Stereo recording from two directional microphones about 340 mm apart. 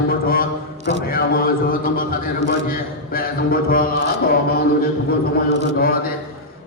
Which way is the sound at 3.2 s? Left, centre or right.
Left.